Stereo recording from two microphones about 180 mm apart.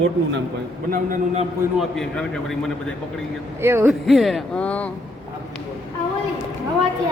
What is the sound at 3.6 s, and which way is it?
Speech, 10° right (ahead or behind).